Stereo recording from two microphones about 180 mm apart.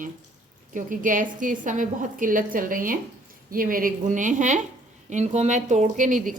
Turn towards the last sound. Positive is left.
turn(degrees=-45)  # may be behind; listen again after turning